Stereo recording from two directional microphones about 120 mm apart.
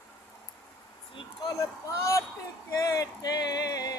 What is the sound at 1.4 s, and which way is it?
Speech, 25° left (ahead or behind).